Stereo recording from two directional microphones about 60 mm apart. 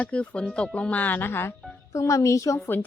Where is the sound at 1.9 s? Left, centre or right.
Left.